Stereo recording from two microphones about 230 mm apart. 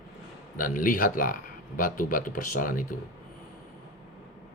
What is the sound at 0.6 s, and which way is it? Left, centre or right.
Speech, left.